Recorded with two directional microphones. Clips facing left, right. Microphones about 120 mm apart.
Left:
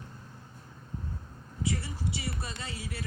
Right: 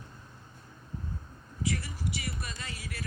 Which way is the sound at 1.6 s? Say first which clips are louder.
Left 1 dB; 25° left (ahead or behind).